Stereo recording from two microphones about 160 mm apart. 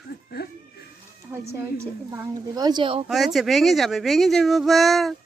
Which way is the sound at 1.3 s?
15° right (ahead or behind).